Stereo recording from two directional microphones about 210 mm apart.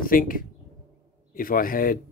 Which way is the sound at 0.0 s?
40° left (ahead or behind).